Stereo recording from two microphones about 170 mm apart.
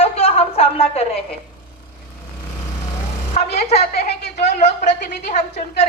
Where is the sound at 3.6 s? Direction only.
40° left (ahead or behind).